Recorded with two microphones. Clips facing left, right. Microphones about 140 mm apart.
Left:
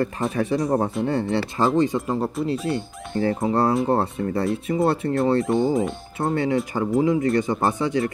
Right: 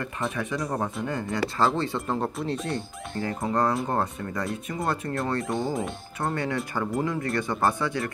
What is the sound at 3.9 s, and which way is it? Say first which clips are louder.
Speech: left 6 dB; 30° left (ahead or behind).